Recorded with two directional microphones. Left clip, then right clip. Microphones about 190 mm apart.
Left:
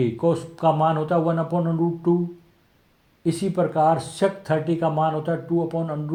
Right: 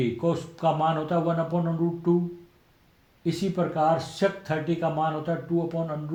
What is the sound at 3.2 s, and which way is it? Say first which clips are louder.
Speech: left 5 dB; 40° left (ahead or behind).